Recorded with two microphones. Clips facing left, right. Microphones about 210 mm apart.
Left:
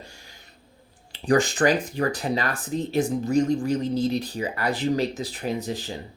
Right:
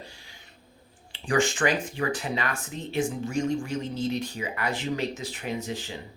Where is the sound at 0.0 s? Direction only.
45° left (ahead or behind).